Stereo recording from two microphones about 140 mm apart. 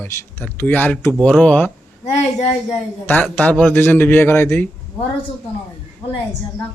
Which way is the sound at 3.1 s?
15° left (ahead or behind).